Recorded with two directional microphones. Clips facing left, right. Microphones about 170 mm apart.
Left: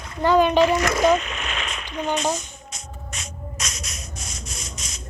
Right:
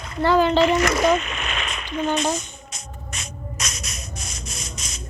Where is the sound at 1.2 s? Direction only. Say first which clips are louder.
Right 1 dB; 60° right (ahead or behind).